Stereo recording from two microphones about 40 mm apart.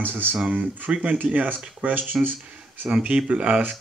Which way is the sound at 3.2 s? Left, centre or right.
Right.